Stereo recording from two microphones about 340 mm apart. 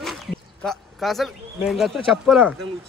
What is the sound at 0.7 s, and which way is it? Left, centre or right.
Speech, centre.